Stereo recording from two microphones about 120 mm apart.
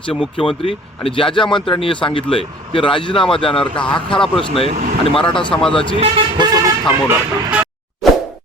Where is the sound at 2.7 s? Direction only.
45° left (ahead or behind).